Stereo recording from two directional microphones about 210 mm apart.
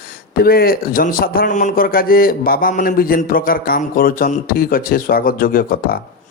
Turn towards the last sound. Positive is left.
turn(degrees=45)  # may be behind; listen again after turning